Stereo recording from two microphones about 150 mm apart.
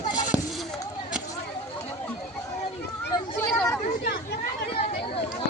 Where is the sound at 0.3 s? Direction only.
5° right (ahead or behind).